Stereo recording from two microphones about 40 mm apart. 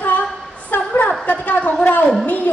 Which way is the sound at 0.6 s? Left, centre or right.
Left.